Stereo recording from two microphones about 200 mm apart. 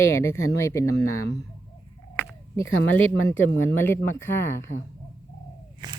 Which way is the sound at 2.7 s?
85° left.